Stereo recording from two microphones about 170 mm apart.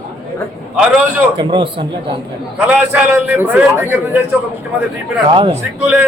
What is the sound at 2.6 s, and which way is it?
A man's voice, 10° right (ahead or behind).